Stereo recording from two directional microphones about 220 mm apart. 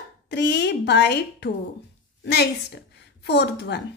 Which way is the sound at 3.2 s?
50° left (ahead or behind).